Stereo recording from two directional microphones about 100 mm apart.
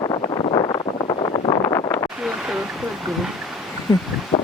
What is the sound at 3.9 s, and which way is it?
Speech, 35° left (ahead or behind).